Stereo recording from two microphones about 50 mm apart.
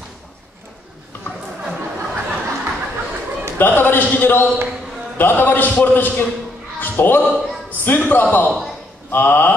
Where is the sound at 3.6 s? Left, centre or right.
Left.